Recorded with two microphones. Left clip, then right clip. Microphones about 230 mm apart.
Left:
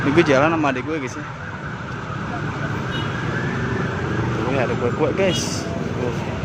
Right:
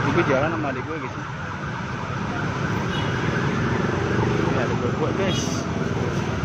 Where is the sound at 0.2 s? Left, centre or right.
Left.